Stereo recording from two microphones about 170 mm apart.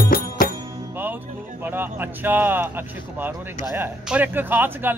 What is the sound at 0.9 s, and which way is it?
Music, 10° right (ahead or behind).